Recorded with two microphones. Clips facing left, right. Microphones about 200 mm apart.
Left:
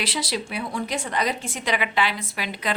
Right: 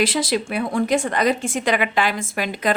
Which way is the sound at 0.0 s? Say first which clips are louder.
Right 8 dB; 50° right (ahead or behind).